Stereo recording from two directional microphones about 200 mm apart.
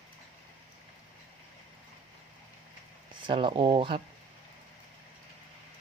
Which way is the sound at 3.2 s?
25° right (ahead or behind).